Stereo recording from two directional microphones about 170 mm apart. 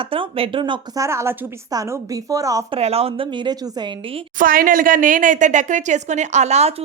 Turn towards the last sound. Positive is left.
turn(degrees=-40)  # may be behind; listen again after turning